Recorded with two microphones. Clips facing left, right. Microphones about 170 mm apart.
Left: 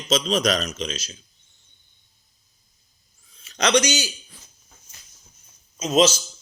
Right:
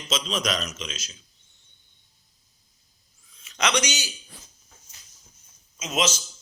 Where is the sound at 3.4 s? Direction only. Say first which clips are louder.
Left 6 dB; 35° left (ahead or behind).